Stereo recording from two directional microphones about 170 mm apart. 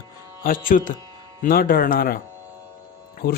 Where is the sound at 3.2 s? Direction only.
60° left (ahead or behind).